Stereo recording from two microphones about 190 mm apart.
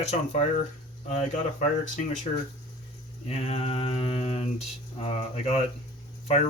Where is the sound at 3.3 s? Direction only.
30° left (ahead or behind).